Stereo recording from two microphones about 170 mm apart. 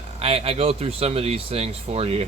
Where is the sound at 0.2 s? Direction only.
35° right (ahead or behind).